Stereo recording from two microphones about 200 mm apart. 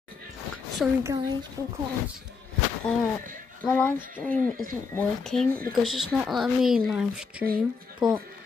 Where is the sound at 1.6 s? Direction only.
15° left (ahead or behind).